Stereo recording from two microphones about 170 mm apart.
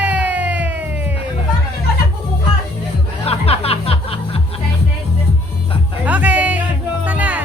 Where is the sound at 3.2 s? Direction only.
35° left (ahead or behind).